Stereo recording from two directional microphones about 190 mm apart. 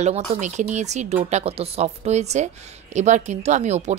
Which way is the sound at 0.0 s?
35° right (ahead or behind).